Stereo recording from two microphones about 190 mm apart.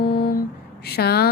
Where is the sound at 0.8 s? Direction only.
55° left (ahead or behind).